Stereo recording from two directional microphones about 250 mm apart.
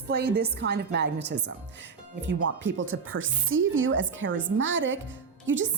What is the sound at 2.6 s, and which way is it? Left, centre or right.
A woman's voice, right.